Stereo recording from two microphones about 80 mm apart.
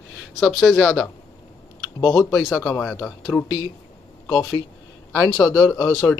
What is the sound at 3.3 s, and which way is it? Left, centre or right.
Speech, centre.